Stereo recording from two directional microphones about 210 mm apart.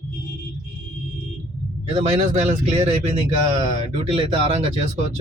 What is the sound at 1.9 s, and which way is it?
Speech, 30° right (ahead or behind).